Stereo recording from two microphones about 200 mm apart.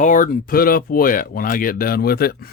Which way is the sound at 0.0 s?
40° left (ahead or behind).